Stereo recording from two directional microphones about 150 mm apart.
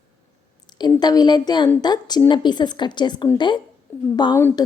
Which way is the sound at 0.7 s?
30° left (ahead or behind).